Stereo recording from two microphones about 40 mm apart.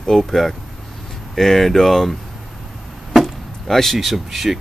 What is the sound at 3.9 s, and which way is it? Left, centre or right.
Speech, centre.